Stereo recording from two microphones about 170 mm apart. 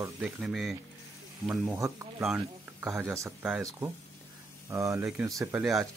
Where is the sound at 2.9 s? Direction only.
15° right (ahead or behind).